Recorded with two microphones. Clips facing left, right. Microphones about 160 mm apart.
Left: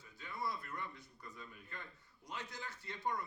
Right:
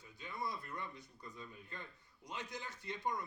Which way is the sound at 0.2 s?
20° right (ahead or behind).